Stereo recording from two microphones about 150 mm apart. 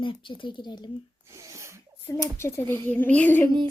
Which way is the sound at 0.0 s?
35° left (ahead or behind).